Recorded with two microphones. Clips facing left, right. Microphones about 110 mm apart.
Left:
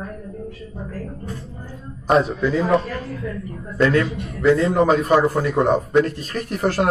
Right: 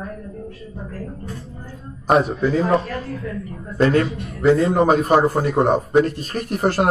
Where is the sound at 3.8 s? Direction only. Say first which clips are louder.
Right 1 dB; 35° right (ahead or behind).